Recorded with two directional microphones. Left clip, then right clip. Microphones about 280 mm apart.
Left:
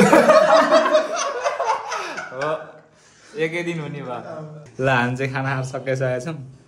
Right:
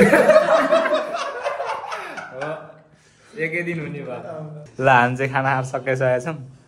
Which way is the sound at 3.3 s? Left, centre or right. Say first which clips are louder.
Left 1 dB; centre.